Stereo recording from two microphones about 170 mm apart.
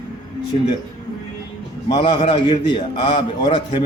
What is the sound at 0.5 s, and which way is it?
Speech, 40° left (ahead or behind).